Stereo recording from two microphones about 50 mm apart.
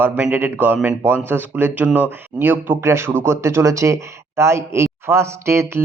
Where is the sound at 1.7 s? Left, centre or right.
Right.